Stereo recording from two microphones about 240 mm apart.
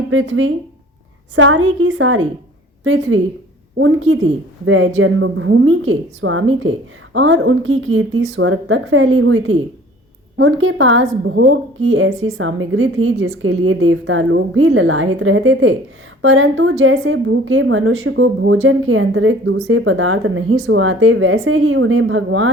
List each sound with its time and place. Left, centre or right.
0.1 s a woman's voice: right